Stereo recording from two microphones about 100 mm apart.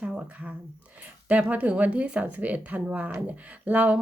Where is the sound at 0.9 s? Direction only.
15° right (ahead or behind).